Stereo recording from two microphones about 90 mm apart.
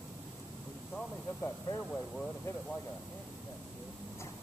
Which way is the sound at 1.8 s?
10° left (ahead or behind).